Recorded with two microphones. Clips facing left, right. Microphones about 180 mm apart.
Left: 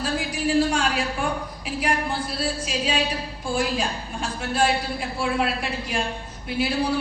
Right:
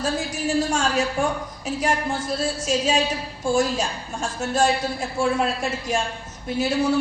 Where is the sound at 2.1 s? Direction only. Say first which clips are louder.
Right 2 dB; 45° right (ahead or behind).